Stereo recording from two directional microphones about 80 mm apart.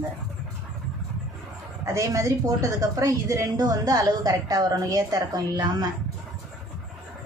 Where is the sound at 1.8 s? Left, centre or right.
Right.